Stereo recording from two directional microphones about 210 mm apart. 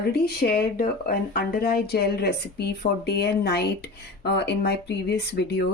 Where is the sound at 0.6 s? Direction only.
45° left (ahead or behind).